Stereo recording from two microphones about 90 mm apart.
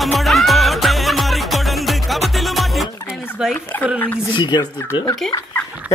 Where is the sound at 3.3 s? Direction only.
5° right (ahead or behind).